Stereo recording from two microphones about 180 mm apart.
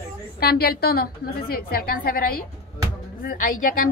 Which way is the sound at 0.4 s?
60° left (ahead or behind).